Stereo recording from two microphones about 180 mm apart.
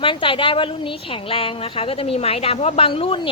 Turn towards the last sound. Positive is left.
turn(degrees=30)  # may be behind; listen again after turning